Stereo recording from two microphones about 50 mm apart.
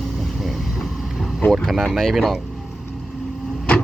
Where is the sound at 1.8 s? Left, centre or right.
Centre.